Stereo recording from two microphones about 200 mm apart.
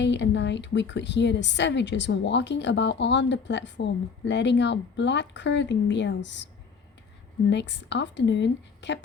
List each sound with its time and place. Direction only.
0.0 s a woman's voice: 60° left (ahead or behind)
7.5 s a woman's voice: 60° left (ahead or behind)